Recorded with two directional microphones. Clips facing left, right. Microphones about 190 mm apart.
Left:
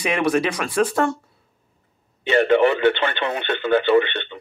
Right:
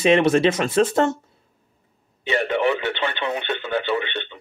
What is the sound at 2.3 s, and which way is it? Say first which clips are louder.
Speech: left 5 dB; 60° left (ahead or behind).